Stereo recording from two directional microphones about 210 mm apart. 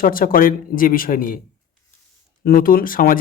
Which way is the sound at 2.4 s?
45° left (ahead or behind).